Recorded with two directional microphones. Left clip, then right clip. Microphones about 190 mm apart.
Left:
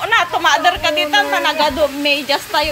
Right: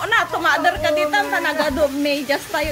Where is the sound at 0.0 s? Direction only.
15° right (ahead or behind).